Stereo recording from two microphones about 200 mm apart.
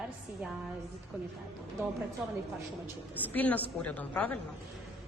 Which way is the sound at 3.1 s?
10° left (ahead or behind).